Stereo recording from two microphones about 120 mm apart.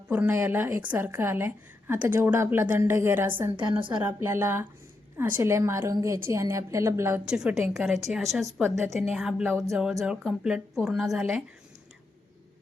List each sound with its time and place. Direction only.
0.1 s a woman's voice: 15° right (ahead or behind)
3.6 s a woman's voice: 45° right (ahead or behind)
4.0 s a woman's voice: 20° right (ahead or behind)
7.3 s speech: 5° right (ahead or behind)